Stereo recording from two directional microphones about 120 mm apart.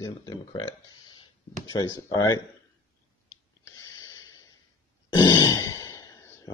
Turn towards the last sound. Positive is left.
turn(degrees=30)  # may be behind; listen again after turning